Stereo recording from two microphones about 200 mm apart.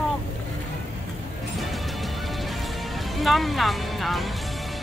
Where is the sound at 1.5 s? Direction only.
Centre (ahead or behind).